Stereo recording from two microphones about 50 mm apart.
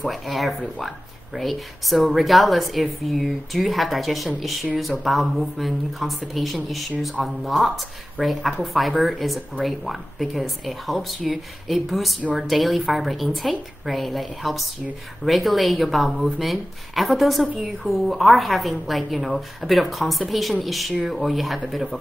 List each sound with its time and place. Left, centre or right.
0.0 s a woman's voice: centre